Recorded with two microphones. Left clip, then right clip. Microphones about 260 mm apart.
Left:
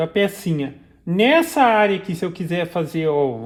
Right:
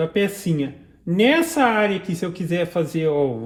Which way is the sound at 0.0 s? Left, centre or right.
Left.